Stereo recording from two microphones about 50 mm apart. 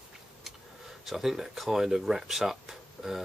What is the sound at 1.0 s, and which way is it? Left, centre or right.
Speech, centre.